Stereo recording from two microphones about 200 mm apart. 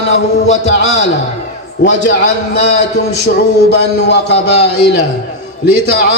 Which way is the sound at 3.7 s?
55° left (ahead or behind).